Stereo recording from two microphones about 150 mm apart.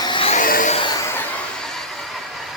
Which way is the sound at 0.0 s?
35° left (ahead or behind).